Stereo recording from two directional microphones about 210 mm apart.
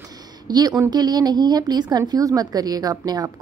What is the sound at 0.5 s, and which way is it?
A woman's voice, 20° right (ahead or behind).